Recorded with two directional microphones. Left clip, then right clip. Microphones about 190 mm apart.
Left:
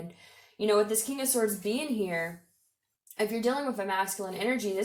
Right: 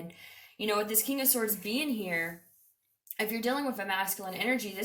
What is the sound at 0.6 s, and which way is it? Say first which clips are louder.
Speech: left 5 dB; 30° left (ahead or behind).